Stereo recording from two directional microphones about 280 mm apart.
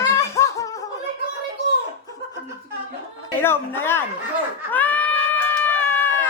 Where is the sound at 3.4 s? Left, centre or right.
Centre.